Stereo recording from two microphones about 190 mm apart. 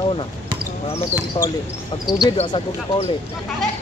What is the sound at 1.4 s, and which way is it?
Speech, 40° left (ahead or behind).